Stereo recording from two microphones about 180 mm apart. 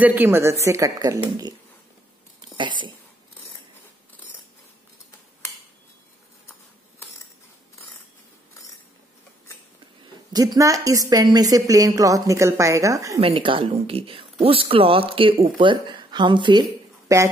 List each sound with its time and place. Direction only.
0.0 s a woman's voice: 10° right (ahead or behind)
10.3 s speech: 20° right (ahead or behind)
13.2 s a woman's voice: 30° right (ahead or behind)